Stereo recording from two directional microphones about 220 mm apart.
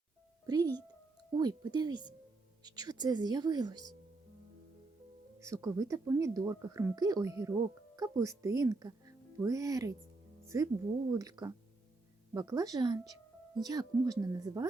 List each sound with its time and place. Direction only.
0.4 s speech: 20° right (ahead or behind)
5.4 s speech: 15° right (ahead or behind)